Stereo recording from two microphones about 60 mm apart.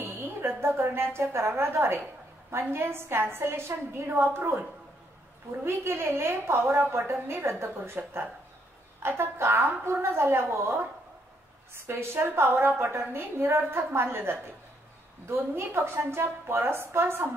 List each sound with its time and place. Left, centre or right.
0.0 s a woman's voice: right